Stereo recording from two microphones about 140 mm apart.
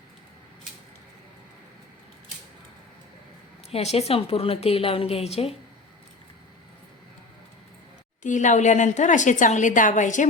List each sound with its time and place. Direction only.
3.7 s a woman's voice: 50° left (ahead or behind)
8.2 s a woman's voice: 60° left (ahead or behind)